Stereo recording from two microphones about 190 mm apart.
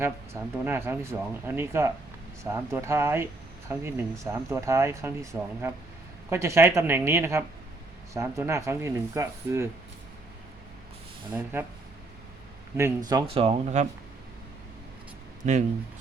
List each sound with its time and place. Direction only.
0.6 s speech: 10° right (ahead or behind)
12.7 s speech: 15° right (ahead or behind); by 13.8 s 35° right (ahead or behind)
15.4 s speech: 40° right (ahead or behind)